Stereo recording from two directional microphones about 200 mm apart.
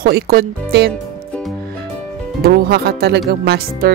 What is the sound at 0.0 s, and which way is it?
Speech, 50° right (ahead or behind).